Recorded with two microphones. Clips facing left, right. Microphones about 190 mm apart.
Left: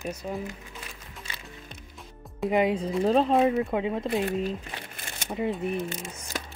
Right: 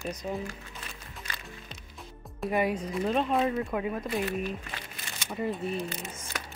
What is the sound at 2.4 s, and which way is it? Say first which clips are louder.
Speech: left 4 dB; 20° left (ahead or behind).